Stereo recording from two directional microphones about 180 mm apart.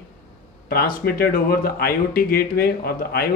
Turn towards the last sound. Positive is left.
turn(degrees=60)  # may be behind; listen again after turning